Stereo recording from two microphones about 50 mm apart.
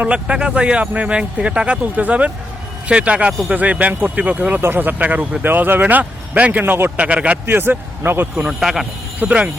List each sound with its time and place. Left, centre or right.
0.1 s speech: centre
7.4 s speech: right
8.4 s a man's voice: centre
9.2 s speech: right